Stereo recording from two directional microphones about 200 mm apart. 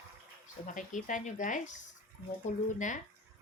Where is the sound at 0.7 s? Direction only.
40° left (ahead or behind).